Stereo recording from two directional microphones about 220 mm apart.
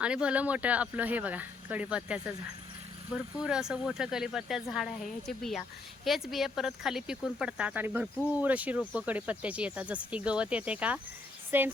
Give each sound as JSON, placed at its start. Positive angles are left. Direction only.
{"t": 0.0, "sound": "speech", "side_deg": -5}
{"t": 3.4, "sound": "speech", "side_deg": -5}